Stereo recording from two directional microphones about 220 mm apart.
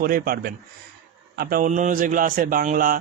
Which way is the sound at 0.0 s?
40° right (ahead or behind).